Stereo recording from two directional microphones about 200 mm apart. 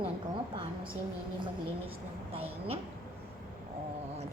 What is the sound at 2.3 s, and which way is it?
Speech, 30° right (ahead or behind).